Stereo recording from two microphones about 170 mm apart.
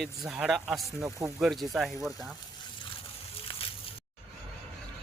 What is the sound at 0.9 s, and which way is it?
Speech, 20° right (ahead or behind).